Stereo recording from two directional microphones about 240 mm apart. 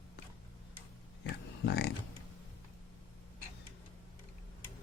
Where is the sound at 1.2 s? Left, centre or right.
Left.